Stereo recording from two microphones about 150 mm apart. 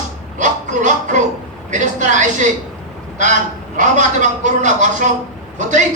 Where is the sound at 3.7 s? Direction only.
55° right (ahead or behind).